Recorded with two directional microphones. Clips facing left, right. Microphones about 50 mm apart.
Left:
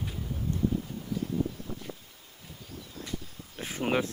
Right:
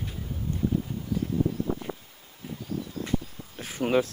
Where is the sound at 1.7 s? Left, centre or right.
Right.